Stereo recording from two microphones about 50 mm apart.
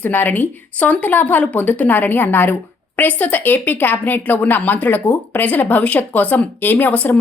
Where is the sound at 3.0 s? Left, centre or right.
Left.